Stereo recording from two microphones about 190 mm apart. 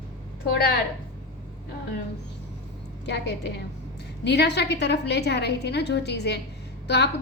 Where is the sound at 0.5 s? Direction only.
55° left (ahead or behind).